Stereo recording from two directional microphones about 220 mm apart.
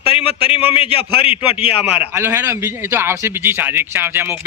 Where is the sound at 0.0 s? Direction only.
25° left (ahead or behind).